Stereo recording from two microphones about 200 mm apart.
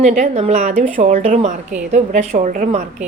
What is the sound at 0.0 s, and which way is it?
A woman's voice, 35° right (ahead or behind).